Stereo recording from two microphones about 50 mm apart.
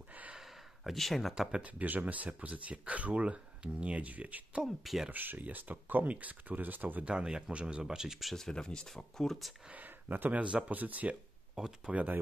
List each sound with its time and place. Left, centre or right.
0.8 s speech: centre
1.5 s speech: right
4.8 s speech: centre
5.1 s speech: right
7.1 s speech: centre
8.4 s speech: centre
9.7 s speech: right
11.5 s speech: centre
11.9 s speech: right